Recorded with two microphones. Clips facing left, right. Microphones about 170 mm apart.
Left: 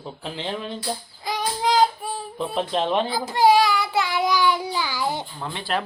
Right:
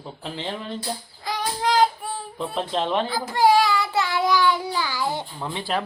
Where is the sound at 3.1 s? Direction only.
20° left (ahead or behind).